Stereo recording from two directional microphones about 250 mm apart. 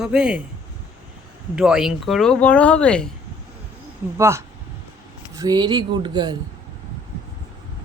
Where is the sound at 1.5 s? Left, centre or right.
Centre.